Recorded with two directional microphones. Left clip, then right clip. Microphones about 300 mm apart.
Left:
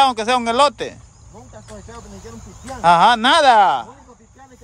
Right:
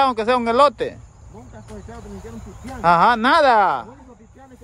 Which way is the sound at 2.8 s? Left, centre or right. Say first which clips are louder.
Left 3 dB; centre.